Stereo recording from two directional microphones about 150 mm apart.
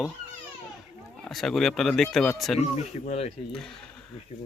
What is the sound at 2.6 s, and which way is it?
Speech, 45° left (ahead or behind).